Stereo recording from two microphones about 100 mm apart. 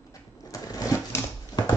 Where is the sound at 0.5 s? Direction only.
35° left (ahead or behind).